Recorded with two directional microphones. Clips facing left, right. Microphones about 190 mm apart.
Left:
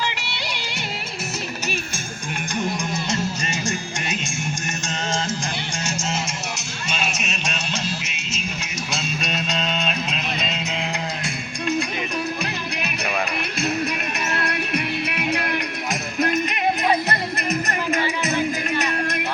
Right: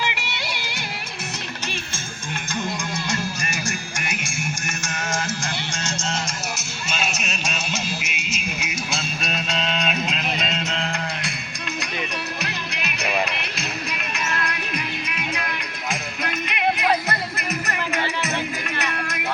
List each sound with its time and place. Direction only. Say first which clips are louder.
0.0 s music: even; 10° right (ahead or behind)
3.1 s music: left 2 dB; 20° left (ahead or behind)
6.6 s music: even; 5° right (ahead or behind)
15.0 s music: left 5 dB; 60° left (ahead or behind)
15.9 s music: left 6 dB; 40° left (ahead or behind)